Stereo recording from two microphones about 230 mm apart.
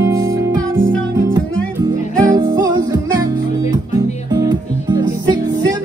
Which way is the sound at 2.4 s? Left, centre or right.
Centre.